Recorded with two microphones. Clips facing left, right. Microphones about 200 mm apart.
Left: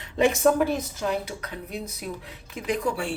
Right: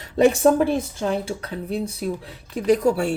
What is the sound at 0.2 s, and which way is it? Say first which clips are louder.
Speech: right 4 dB; 35° right (ahead or behind).